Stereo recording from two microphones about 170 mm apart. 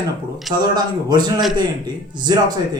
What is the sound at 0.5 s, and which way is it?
Speech, 25° right (ahead or behind).